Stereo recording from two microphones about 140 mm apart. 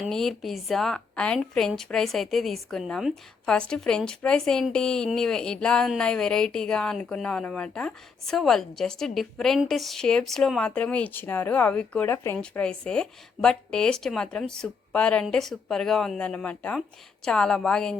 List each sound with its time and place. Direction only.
0.0 s a woman's voice: centre (ahead or behind)
12.1 s speech: 20° left (ahead or behind)
12.4 s a woman's voice: 5° left (ahead or behind)